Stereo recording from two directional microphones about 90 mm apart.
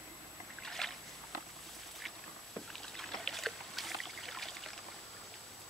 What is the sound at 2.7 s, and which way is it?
Rowboat, 5° left (ahead or behind).